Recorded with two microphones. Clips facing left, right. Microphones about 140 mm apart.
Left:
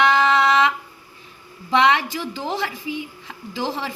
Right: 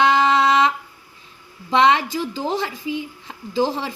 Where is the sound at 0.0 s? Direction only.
20° right (ahead or behind).